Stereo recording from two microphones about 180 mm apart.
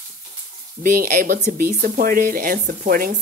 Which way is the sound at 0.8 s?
50° right (ahead or behind).